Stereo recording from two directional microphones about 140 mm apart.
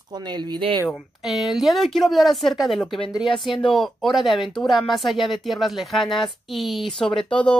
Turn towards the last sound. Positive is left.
turn(degrees=5)  # may be behind; listen again after turning